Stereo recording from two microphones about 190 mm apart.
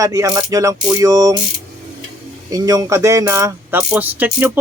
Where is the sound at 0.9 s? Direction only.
20° right (ahead or behind).